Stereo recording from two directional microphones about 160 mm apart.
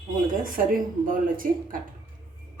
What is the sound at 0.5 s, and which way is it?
Speech, 60° right (ahead or behind).